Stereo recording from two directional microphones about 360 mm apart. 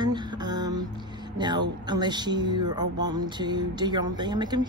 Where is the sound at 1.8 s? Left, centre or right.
Centre.